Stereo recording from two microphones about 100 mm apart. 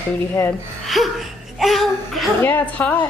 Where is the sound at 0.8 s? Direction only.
Centre (ahead or behind).